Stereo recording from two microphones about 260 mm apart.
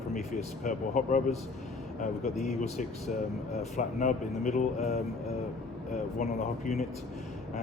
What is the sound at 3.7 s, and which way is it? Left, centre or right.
Speech, left.